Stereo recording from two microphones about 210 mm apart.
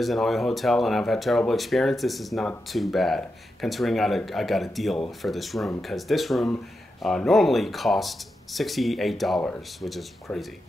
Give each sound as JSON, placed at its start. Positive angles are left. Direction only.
{"t": 0.0, "sound": "speech", "side_deg": 0}